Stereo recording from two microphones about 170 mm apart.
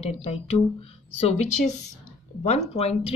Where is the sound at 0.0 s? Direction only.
35° left (ahead or behind).